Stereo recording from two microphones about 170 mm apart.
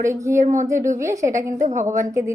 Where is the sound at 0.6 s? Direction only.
15° right (ahead or behind).